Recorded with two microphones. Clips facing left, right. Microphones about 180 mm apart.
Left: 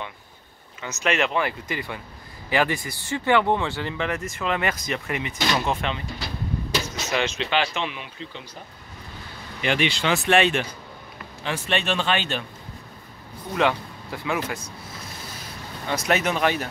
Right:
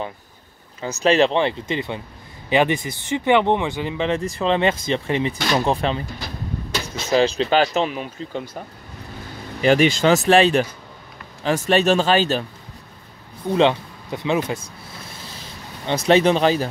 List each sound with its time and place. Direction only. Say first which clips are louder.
0.7 s speech: right 8 dB; 35° right (ahead or behind)
4.2 s speech: right 7 dB; 30° right (ahead or behind)
7.1 s speech: right 9 dB; 35° right (ahead or behind)
9.6 s speech: right 8 dB; 40° right (ahead or behind)
13.6 s speech: right 5 dB; 25° right (ahead or behind)
15.9 s speech: right 8 dB; 30° right (ahead or behind)